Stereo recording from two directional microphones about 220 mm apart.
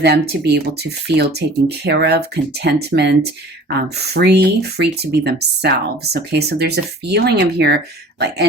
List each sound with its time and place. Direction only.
0.0 s speech: 50° right (ahead or behind)